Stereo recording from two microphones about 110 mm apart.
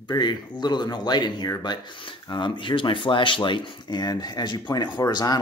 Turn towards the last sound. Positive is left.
turn(degrees=40)  # may be behind; listen again after turning